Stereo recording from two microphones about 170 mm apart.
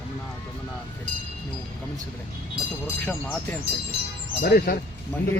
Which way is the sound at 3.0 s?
10° left (ahead or behind).